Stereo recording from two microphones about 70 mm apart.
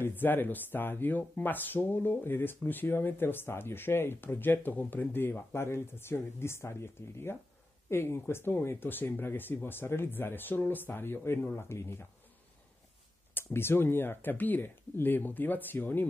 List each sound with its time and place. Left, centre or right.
0.0 s speech: left
13.3 s speech: left